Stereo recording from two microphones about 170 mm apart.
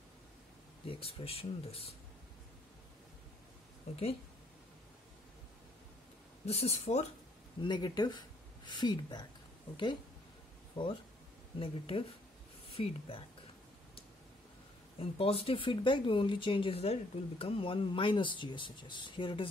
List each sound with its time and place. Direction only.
0.8 s speech: 35° left (ahead or behind)
6.4 s speech: 35° left (ahead or behind)
7.6 s speech: 25° left (ahead or behind)
10.8 s speech: 30° left (ahead or behind)
15.0 s speech: 35° left (ahead or behind)